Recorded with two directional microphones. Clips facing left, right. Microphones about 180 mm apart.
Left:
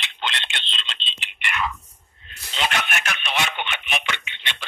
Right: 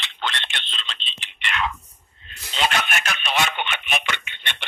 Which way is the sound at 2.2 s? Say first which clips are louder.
Right 2 dB; 35° right (ahead or behind).